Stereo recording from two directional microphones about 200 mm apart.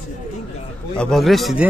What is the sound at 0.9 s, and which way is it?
Speech, 5° left (ahead or behind).